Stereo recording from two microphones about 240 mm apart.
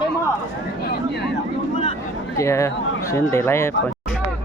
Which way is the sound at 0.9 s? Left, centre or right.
Left.